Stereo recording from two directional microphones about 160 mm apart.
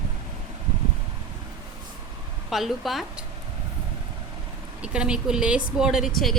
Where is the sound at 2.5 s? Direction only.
Centre (ahead or behind).